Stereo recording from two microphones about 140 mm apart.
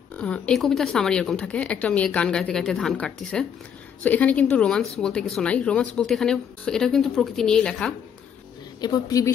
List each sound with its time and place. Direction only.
0.1 s a woman's voice: 10° left (ahead or behind)
8.8 s speech: 25° left (ahead or behind)